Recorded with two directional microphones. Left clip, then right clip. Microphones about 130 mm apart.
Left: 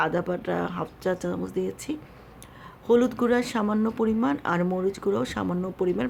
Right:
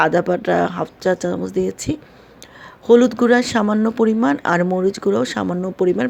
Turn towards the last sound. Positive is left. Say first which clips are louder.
# right 8 dB
turn(degrees=-35)  # may be behind; listen again after turning